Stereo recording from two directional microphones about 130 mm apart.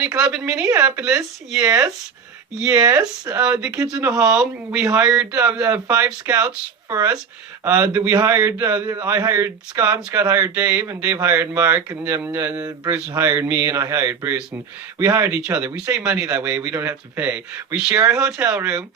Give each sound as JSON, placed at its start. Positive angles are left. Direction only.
{"t": 0.0, "sound": "speech", "side_deg": -10}
{"t": 1.6, "sound": "speech", "side_deg": -25}
{"t": 2.6, "sound": "speech", "side_deg": -10}
{"t": 6.9, "sound": "speech", "side_deg": -25}
{"t": 12.6, "sound": "speech", "side_deg": -30}
{"t": 13.2, "sound": "speech", "side_deg": -15}
{"t": 15.7, "sound": "speech", "side_deg": -10}